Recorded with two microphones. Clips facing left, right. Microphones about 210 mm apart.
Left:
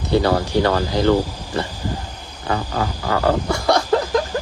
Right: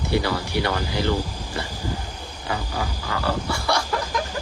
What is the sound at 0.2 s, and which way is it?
Speech, 50° left (ahead or behind).